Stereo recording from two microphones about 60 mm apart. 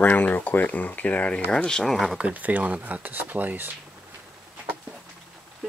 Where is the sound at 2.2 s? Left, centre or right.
Right.